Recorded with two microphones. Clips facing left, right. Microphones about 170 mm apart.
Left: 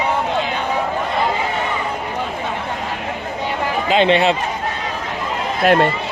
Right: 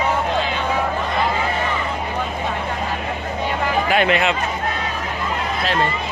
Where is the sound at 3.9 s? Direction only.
25° left (ahead or behind).